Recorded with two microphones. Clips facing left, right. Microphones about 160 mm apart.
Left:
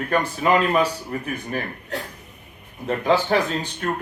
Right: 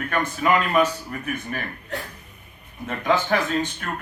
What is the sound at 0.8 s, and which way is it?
Speech, 35° left (ahead or behind).